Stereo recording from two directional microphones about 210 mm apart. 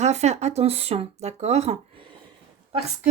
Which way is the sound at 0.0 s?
30° right (ahead or behind).